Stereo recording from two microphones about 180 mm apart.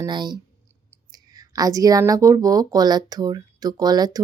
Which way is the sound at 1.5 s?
20° right (ahead or behind).